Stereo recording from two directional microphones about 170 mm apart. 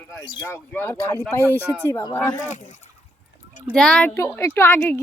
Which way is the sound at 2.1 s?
10° left (ahead or behind).